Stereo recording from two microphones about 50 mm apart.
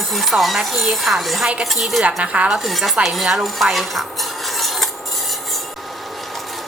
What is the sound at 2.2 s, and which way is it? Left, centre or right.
Speech, right.